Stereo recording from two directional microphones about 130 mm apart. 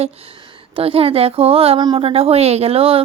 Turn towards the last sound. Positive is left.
turn(degrees=-50)  # may be behind; listen again after turning